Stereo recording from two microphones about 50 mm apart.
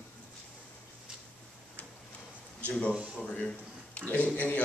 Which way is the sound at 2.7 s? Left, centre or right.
Left.